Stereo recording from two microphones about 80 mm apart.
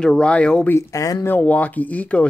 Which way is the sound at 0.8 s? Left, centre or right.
Left.